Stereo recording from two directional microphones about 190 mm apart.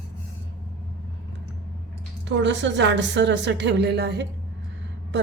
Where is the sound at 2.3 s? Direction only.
70° right (ahead or behind).